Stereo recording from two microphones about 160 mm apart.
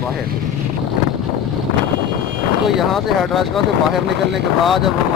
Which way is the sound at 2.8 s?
Centre (ahead or behind).